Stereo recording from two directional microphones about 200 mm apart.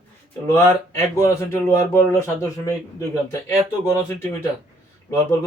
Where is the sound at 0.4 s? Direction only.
15° left (ahead or behind).